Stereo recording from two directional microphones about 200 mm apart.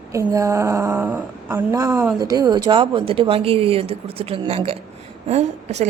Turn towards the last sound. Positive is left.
turn(degrees=-35)  # may be behind; listen again after turning